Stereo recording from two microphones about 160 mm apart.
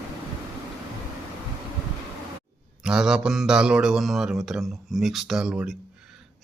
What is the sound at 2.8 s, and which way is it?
A man's voice, 5° right (ahead or behind).